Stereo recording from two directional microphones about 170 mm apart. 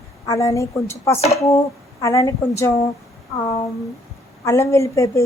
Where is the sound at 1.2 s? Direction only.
40° left (ahead or behind).